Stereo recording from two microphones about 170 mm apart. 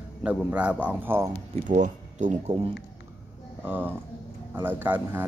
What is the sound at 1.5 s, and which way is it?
Speech, 45° right (ahead or behind).